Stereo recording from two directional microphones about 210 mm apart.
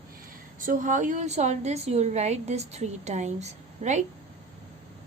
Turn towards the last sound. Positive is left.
turn(degrees=-35)  # may be behind; listen again after turning